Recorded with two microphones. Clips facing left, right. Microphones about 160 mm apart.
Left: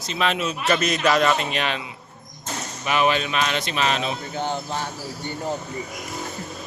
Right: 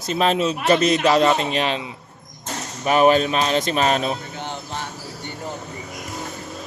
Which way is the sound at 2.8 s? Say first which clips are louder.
Right 6 dB; 40° right (ahead or behind).